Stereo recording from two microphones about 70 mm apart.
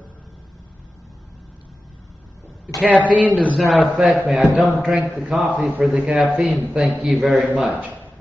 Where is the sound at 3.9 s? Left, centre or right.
Centre.